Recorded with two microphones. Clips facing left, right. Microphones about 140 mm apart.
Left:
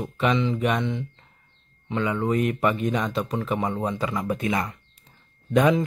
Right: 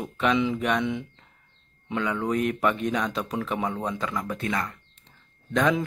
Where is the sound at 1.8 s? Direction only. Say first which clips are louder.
Left 2 dB; centre (ahead or behind).